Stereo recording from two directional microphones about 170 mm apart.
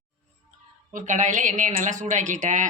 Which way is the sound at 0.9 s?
50° right (ahead or behind).